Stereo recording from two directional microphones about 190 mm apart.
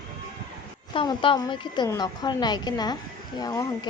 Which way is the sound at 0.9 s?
25° left (ahead or behind).